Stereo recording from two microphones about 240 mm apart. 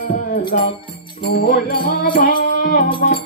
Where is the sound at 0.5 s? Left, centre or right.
Left.